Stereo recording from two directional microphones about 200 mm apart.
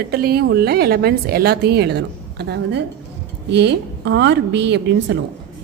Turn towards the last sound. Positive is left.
turn(degrees=-60)  # may be behind; listen again after turning